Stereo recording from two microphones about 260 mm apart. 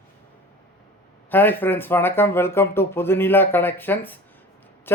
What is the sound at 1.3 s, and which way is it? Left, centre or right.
Speech, centre.